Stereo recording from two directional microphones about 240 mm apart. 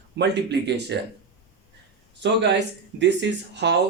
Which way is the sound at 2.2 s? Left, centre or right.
Right.